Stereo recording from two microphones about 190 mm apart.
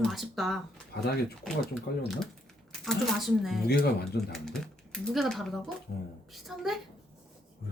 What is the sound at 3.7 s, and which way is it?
Speech, 55° left (ahead or behind).